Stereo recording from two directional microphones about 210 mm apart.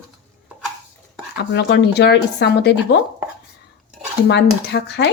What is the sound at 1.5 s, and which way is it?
Speech, 55° left (ahead or behind).